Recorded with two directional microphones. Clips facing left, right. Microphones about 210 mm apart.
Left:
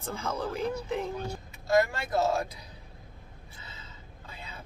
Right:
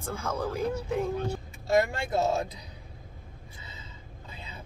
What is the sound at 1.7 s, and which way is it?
Speech, 30° right (ahead or behind).